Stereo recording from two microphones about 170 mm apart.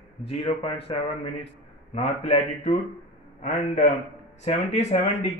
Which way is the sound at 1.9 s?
40° left (ahead or behind).